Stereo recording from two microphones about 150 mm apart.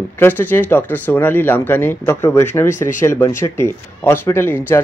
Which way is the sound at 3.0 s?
20° left (ahead or behind).